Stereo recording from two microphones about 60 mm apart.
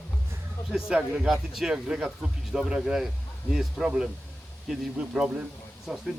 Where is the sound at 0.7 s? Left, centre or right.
Centre.